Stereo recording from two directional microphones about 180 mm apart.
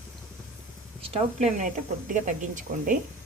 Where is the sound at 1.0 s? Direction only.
35° right (ahead or behind).